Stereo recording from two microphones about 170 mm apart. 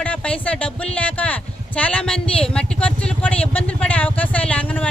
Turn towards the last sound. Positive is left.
turn(degrees=10)  # may be behind; listen again after turning